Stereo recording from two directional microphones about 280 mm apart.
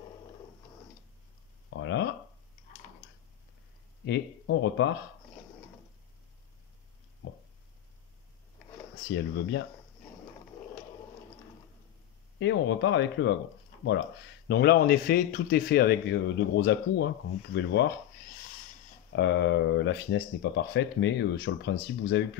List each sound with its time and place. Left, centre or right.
1.7 s a sound: left
4.0 s speech: left
9.1 s speech: left
12.4 s speech: left
14.5 s speech: left
19.1 s speech: left